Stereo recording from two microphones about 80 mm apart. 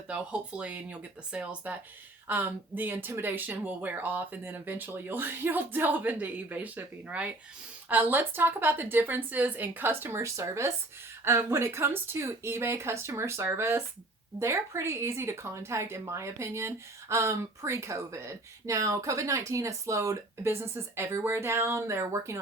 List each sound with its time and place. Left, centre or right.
0.1 s speech: centre; by 22.4 s right